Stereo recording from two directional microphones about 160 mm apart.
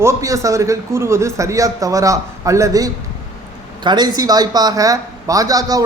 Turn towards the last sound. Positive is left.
turn(degrees=-20)  # may be behind; listen again after turning